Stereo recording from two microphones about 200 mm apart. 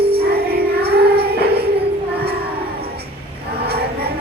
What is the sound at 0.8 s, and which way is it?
Music, 55° right (ahead or behind).